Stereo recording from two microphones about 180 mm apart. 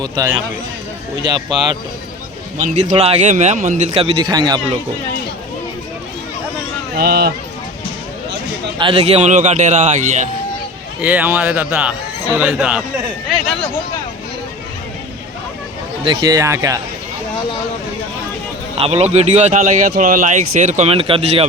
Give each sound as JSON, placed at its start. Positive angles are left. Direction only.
{"t": 0.0, "sound": "speech", "side_deg": -20}
{"t": 2.6, "sound": "speech", "side_deg": -40}
{"t": 3.9, "sound": "speech", "side_deg": -30}
{"t": 6.9, "sound": "speech", "side_deg": -60}
{"t": 8.8, "sound": "speech", "side_deg": -30}
{"t": 11.0, "sound": "a man's voice", "side_deg": -10}
{"t": 16.0, "sound": "speech", "side_deg": -20}
{"t": 18.8, "sound": "speech", "side_deg": -35}